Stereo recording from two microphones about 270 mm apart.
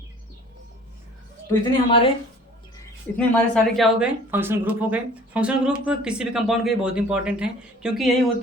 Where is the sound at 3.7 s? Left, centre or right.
Centre.